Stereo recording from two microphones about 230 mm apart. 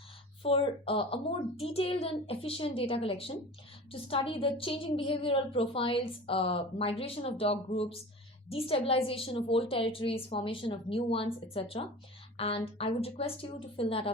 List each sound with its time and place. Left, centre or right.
0.4 s a woman's voice: left